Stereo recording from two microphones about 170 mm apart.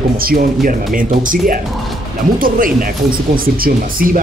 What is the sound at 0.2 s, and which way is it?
Speech, 60° right (ahead or behind).